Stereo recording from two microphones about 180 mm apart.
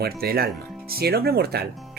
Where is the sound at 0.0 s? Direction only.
60° right (ahead or behind).